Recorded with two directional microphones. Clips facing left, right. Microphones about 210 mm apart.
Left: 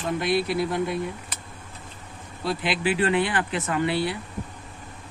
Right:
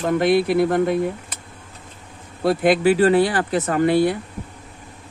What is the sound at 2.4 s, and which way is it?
Speech, 50° right (ahead or behind).